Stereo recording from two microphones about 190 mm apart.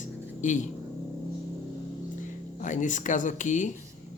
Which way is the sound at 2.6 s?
40° left (ahead or behind).